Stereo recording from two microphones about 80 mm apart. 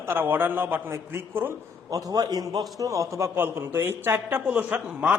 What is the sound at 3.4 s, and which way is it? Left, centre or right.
A man's voice, right.